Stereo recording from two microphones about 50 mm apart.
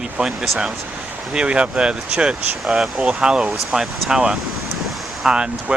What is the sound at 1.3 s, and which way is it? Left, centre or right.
Speech, centre.